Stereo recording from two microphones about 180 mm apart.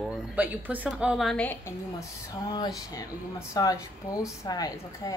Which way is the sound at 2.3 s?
20° left (ahead or behind).